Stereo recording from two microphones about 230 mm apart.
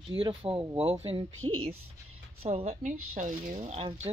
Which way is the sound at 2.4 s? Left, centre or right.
Right.